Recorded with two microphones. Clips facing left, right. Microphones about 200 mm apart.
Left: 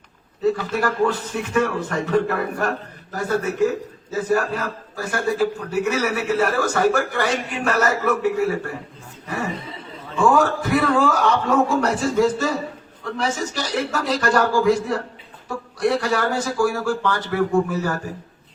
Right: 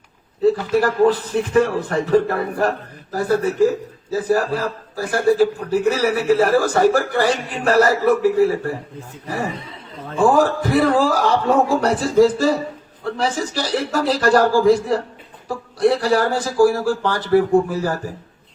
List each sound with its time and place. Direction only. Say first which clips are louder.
0.8 s a man's voice: right 5 dB; 35° right (ahead or behind)
10.2 s a man's voice: right 2 dB; 35° right (ahead or behind)